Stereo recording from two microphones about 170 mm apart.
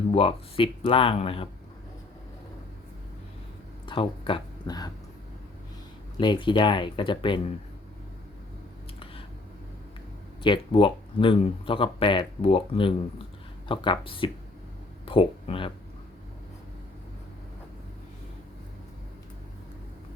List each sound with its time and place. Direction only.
0.1 s speech: 35° left (ahead or behind)
3.8 s speech: 30° left (ahead or behind)
6.1 s speech: 30° left (ahead or behind)
10.4 s speech: 30° left (ahead or behind)